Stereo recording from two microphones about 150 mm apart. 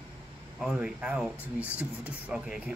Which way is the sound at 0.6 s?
5° right (ahead or behind).